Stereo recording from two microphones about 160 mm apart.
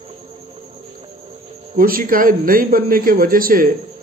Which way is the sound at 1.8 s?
65° right (ahead or behind).